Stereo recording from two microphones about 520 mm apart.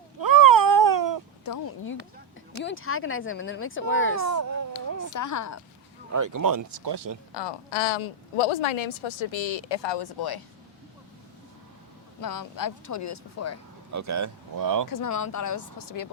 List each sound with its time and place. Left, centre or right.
0.2 s a sound: right
1.6 s a sound: left
2.6 s speech: left
4.2 s speech: right
5.1 s speech: left
6.1 s speech: right
7.3 s a woman's voice: left
12.2 s speech: left
13.9 s speech: right
14.8 s speech: left